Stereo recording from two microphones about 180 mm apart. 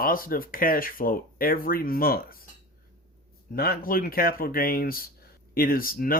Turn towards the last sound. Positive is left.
turn(degrees=55)  # may be behind; listen again after turning